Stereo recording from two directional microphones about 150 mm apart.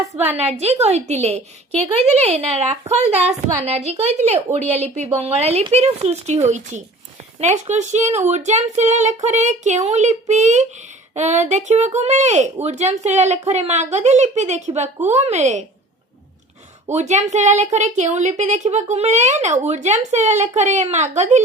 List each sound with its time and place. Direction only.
0.3 s a woman's voice: 45° right (ahead or behind)
16.9 s a woman's voice: 50° right (ahead or behind)